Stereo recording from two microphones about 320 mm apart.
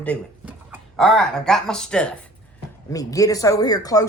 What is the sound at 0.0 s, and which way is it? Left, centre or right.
A man's voice, centre.